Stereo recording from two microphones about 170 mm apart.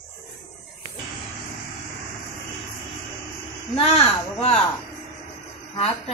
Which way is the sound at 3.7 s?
35° left (ahead or behind).